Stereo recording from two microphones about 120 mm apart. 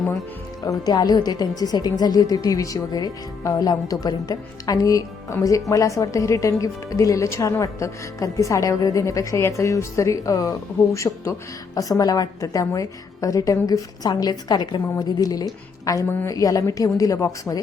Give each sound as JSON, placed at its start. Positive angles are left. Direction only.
{"t": 0.6, "sound": "a woman's voice", "side_deg": 35}